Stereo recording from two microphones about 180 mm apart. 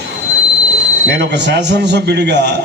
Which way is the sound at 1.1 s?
75° right (ahead or behind).